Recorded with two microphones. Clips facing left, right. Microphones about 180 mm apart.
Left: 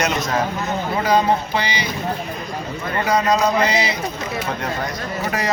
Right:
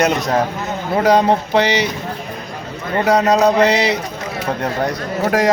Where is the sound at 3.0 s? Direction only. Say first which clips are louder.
Right 5 dB; 70° right (ahead or behind).